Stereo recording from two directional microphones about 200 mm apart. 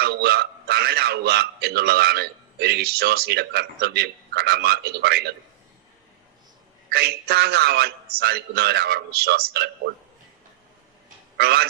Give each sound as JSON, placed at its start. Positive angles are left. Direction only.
{"t": 0.0, "sound": "a man's voice", "side_deg": -55}
{"t": 6.9, "sound": "a man's voice", "side_deg": -50}
{"t": 11.3, "sound": "a man's voice", "side_deg": -55}